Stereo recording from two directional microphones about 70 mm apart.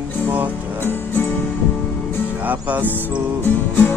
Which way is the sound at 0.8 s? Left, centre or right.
Left.